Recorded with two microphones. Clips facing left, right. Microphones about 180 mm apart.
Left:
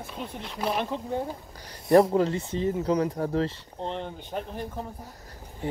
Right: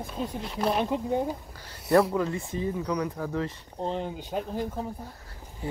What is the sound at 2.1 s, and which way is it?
Speech, 30° left (ahead or behind).